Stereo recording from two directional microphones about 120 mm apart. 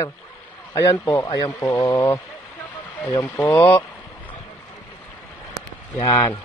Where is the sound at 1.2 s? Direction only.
45° left (ahead or behind).